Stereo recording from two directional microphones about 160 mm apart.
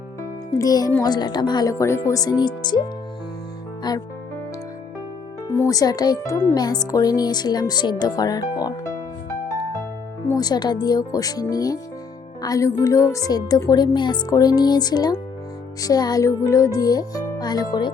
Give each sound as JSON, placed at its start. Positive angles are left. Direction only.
{"t": 0.2, "sound": "music", "side_deg": 20}
{"t": 1.0, "sound": "a woman's voice", "side_deg": 25}
{"t": 3.9, "sound": "a woman's voice", "side_deg": 25}
{"t": 5.5, "sound": "a woman's voice", "side_deg": 20}
{"t": 10.3, "sound": "a woman's voice", "side_deg": 25}